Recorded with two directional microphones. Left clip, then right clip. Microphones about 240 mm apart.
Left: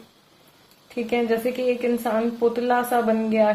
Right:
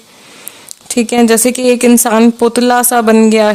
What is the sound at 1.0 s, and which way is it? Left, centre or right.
Speech, right.